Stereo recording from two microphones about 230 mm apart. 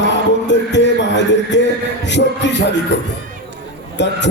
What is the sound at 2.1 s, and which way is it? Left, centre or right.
Speech, left.